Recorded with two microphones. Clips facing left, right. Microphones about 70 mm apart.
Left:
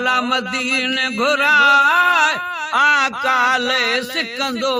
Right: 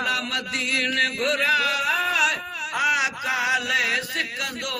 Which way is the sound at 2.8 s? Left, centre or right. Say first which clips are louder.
Left 8 dB; left.